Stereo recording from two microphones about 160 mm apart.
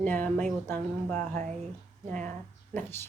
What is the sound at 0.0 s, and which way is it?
Speech, 10° left (ahead or behind).